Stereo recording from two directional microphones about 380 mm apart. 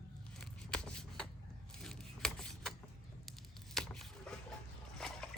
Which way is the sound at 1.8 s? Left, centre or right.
Centre.